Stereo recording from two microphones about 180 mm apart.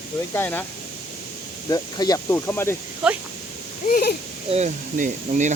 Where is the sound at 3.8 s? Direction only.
55° left (ahead or behind).